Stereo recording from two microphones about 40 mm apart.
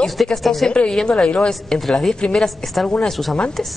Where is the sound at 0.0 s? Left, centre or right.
Centre.